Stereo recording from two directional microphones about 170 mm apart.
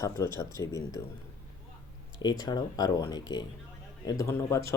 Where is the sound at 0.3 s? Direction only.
20° left (ahead or behind).